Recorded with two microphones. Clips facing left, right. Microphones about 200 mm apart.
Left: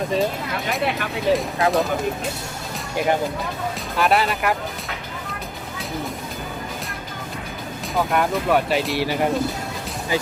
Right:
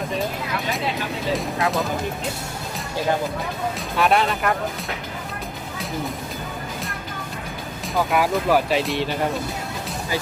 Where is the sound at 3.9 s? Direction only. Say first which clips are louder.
Even; centre (ahead or behind).